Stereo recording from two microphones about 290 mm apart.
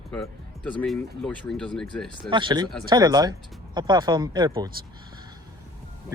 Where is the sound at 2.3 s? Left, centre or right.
Centre.